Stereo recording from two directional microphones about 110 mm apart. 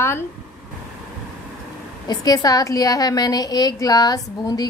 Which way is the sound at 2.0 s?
35° left (ahead or behind).